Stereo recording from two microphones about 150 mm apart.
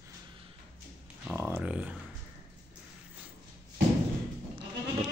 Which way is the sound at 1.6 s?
5° right (ahead or behind).